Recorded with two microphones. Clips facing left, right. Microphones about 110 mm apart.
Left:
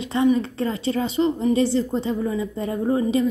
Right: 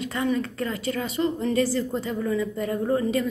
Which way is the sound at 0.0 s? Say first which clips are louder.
Left 6 dB; 20° left (ahead or behind).